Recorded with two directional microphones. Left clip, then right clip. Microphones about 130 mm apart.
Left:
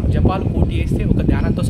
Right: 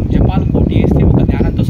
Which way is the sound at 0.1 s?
40° left (ahead or behind).